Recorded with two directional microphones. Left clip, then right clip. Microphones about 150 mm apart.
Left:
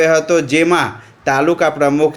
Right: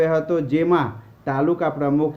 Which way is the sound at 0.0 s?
15° left (ahead or behind).